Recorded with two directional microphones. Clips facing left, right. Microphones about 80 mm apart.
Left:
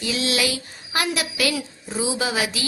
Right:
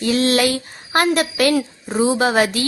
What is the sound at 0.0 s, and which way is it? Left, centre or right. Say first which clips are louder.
A woman's voice: right 7 dB; right.